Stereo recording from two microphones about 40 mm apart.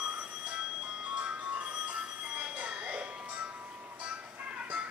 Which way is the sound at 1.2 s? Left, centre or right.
Right.